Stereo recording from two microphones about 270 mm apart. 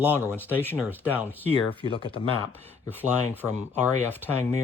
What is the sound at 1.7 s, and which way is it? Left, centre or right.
Speech, centre.